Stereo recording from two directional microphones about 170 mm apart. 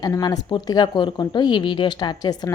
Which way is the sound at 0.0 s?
20° left (ahead or behind).